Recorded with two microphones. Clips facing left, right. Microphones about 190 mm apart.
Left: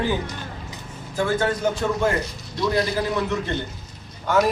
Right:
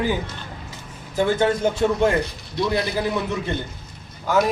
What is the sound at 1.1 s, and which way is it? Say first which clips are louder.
Speech: right 3 dB; 20° right (ahead or behind).